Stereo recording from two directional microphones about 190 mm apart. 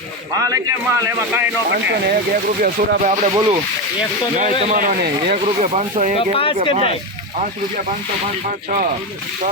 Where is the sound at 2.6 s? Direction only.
45° right (ahead or behind).